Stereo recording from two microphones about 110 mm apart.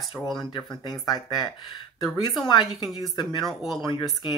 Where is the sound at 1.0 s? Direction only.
40° left (ahead or behind).